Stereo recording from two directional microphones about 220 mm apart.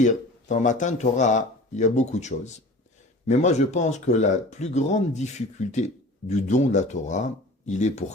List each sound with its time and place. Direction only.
0.0 s speech: 35° left (ahead or behind)